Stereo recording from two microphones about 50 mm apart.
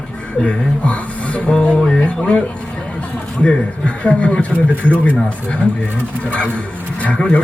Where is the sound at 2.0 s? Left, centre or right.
Left.